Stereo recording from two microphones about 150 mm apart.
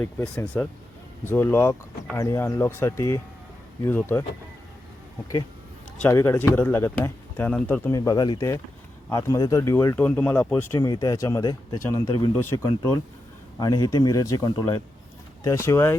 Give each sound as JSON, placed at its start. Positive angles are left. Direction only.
{"t": 0.0, "sound": "speech", "side_deg": 10}
{"t": 6.0, "sound": "speech", "side_deg": 15}
{"t": 12.4, "sound": "speech", "side_deg": 20}